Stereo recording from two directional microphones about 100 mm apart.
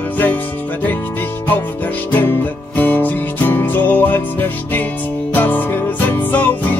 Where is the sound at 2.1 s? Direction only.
20° left (ahead or behind).